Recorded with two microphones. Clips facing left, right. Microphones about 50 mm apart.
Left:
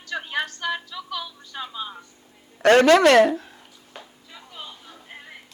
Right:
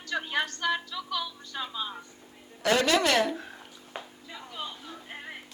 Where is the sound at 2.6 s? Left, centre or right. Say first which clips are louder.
Left 10 dB; left.